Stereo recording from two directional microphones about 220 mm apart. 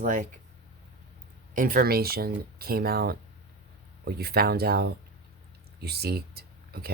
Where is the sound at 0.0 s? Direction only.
40° right (ahead or behind).